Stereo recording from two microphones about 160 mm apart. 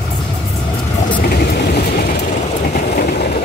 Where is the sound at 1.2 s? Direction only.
70° left (ahead or behind).